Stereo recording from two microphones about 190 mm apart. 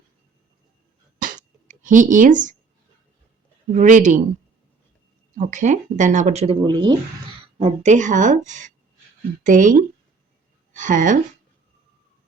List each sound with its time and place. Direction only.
1.2 s a sound: 40° right (ahead or behind)
3.8 s speech: 40° right (ahead or behind)
5.4 s speech: 40° right (ahead or behind); by 6.9 s 25° right (ahead or behind)
7.6 s a woman's voice: 35° right (ahead or behind)